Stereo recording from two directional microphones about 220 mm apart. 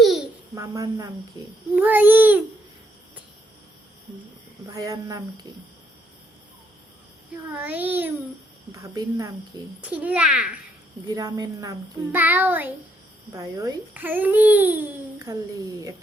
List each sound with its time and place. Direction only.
0.0 s babbling: centre (ahead or behind)
0.5 s a child's voice: 15° right (ahead or behind)
1.7 s child singing: 10° right (ahead or behind)
4.6 s a child's voice: 15° right (ahead or behind)
7.5 s a child's voice: 10° right (ahead or behind)
11.1 s a child's voice: 15° right (ahead or behind)